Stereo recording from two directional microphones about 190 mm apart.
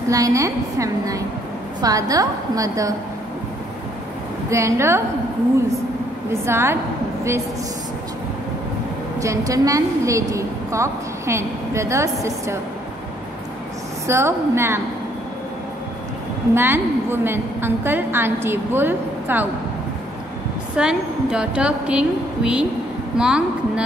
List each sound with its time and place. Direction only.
0.1 s a woman's voice: 15° right (ahead or behind)
4.5 s a woman's voice: 15° right (ahead or behind)
6.4 s a woman's voice: 15° right (ahead or behind)
9.2 s a woman's voice: 15° right (ahead or behind)
14.0 s a woman's voice: 15° right (ahead or behind)
16.5 s a woman's voice: 10° right (ahead or behind)
20.7 s a woman's voice: 5° right (ahead or behind)